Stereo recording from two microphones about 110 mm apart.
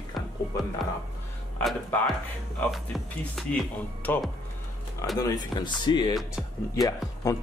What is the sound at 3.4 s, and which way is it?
Speech, centre (ahead or behind).